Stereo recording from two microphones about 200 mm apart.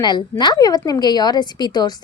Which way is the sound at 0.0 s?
20° left (ahead or behind).